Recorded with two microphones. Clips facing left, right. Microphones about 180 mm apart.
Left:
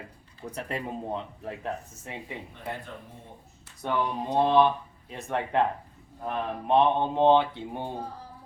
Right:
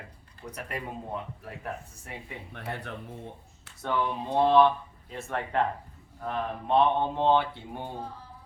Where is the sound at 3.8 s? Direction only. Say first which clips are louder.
Left 1 dB; 15° left (ahead or behind).